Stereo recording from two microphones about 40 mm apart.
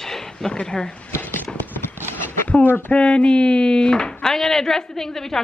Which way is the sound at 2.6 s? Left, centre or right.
Left.